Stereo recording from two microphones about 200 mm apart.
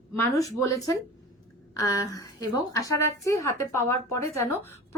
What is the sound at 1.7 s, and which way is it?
Speech, 15° left (ahead or behind).